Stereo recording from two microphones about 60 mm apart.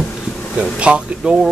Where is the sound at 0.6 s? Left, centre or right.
Centre.